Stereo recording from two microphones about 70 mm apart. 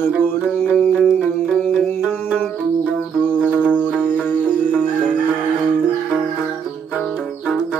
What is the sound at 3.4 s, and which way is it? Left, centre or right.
Music, centre.